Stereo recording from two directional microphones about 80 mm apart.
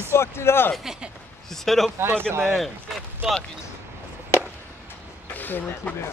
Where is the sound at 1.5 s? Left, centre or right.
Centre.